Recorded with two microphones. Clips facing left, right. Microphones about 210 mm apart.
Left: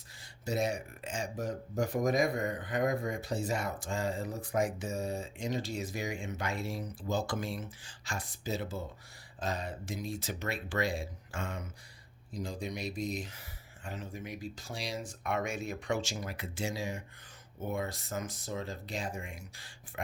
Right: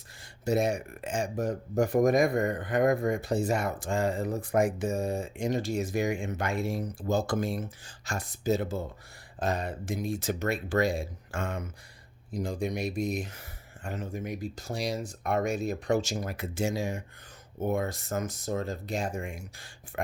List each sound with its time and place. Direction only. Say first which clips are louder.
0.2 s speech: right 6 dB; 55° right (ahead or behind)